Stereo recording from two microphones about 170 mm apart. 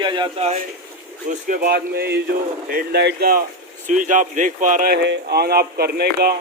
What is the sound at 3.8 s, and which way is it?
A man's voice, 50° right (ahead or behind).